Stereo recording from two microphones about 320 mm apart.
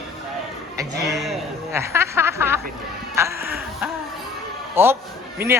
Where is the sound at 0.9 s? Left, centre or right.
Right.